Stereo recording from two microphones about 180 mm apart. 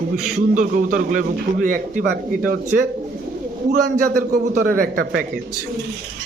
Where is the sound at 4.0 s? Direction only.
50° right (ahead or behind).